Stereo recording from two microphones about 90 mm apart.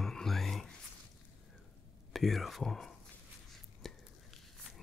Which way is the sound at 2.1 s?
Centre (ahead or behind).